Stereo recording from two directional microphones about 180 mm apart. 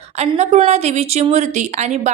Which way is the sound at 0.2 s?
35° right (ahead or behind).